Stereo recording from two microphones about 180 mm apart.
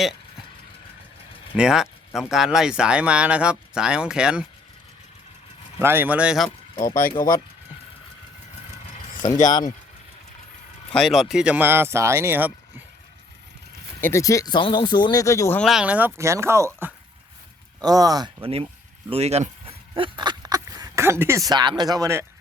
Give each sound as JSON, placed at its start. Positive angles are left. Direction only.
{"t": 1.5, "sound": "speech", "side_deg": -5}
{"t": 5.8, "sound": "speech", "side_deg": -10}
{"t": 7.2, "sound": "speech", "side_deg": 50}
{"t": 9.5, "sound": "speech", "side_deg": 20}
{"t": 10.9, "sound": "speech", "side_deg": 0}
{"t": 14.0, "sound": "speech", "side_deg": 15}
{"t": 15.6, "sound": "speech", "side_deg": -5}